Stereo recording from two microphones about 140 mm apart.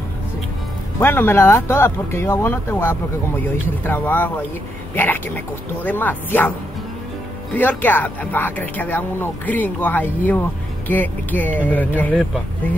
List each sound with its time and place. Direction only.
0.9 s speech: 15° left (ahead or behind)
7.5 s speech: 15° left (ahead or behind)